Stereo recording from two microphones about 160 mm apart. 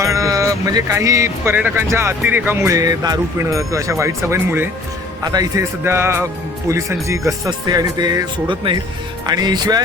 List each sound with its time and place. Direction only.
0.0 s speech: 20° right (ahead or behind)